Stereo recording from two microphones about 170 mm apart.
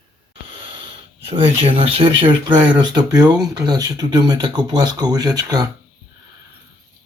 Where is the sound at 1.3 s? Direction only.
35° right (ahead or behind).